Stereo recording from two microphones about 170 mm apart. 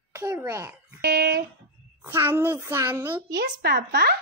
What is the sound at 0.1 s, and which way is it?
Speech, 20° right (ahead or behind).